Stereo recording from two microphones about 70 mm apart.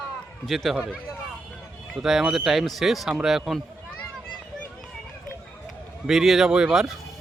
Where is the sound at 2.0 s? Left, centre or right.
Centre.